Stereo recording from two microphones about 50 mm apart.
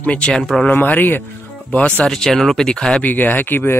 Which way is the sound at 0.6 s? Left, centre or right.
Left.